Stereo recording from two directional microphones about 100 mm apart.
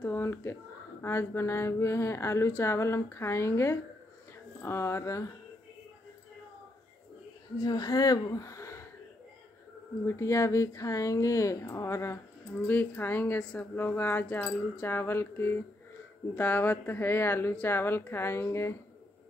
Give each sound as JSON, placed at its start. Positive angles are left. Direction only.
{"t": 0.0, "sound": "a sound", "side_deg": 25}
{"t": 1.0, "sound": "speech", "side_deg": 25}
{"t": 7.6, "sound": "speech", "side_deg": 40}
{"t": 10.0, "sound": "speech", "side_deg": 30}